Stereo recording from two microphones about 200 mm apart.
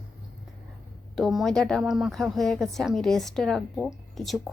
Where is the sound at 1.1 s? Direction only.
Centre (ahead or behind).